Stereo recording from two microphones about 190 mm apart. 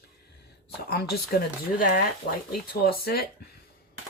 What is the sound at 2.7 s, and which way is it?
Speech, 50° left (ahead or behind).